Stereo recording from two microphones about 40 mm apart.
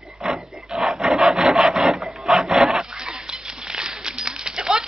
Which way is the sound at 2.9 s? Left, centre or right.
Centre.